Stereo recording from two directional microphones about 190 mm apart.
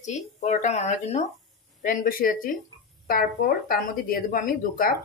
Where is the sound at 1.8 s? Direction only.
45° left (ahead or behind).